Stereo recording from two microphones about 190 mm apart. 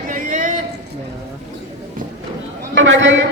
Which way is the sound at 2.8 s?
75° right (ahead or behind).